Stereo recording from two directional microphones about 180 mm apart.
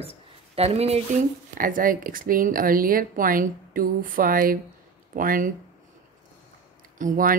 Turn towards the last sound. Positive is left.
turn(degrees=-50)  # may be behind; listen again after turning